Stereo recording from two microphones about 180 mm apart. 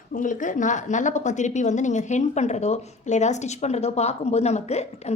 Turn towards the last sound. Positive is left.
turn(degrees=35)  # may be behind; listen again after turning